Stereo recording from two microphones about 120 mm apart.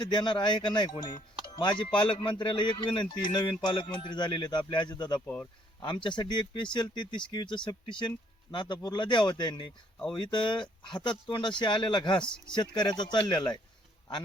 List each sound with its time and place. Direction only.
0.0 s speech: 40° left (ahead or behind)
5.2 s speech: 15° left (ahead or behind)
5.8 s speech: 40° left (ahead or behind)
12.2 s speech: 5° left (ahead or behind)
12.5 s speech: 40° left (ahead or behind)